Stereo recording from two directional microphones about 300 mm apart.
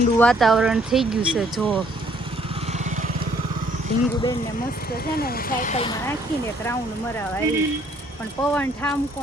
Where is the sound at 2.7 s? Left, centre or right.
Right.